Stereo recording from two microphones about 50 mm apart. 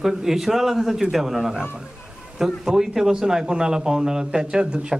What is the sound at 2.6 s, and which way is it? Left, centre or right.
A man's voice, centre.